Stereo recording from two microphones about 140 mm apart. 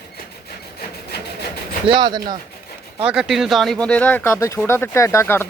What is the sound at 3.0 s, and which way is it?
Speech, 5° right (ahead or behind).